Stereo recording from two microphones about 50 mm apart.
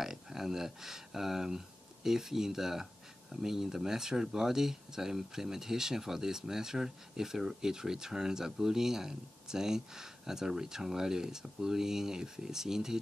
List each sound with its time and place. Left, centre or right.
0.0 s speech: centre